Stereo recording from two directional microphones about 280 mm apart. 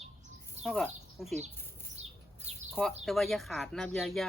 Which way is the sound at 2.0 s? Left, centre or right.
Right.